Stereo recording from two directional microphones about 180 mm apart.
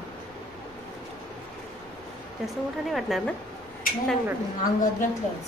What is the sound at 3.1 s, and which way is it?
Speech, centre (ahead or behind).